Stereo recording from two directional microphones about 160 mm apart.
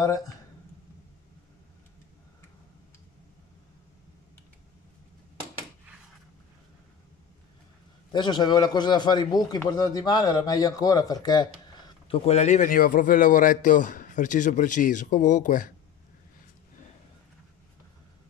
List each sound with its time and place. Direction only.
8.1 s speech: 25° left (ahead or behind)
12.1 s a man's voice: 40° left (ahead or behind)